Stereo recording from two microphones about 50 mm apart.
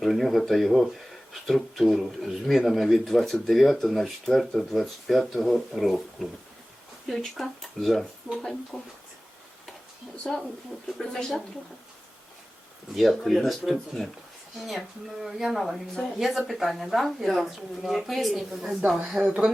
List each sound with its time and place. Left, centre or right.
0.0 s speech: centre
7.3 s speech: centre
8.3 s speech: centre
8.7 s speech: centre
10.3 s speech: centre
12.9 s speech: centre
19.2 s speech: centre